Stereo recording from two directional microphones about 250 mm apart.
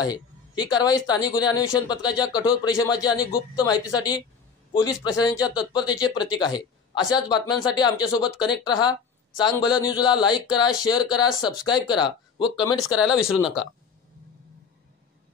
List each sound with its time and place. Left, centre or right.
0.0 s speech: centre
12.8 s speech: centre